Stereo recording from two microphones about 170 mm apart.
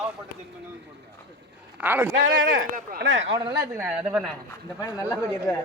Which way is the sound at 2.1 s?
55° right (ahead or behind).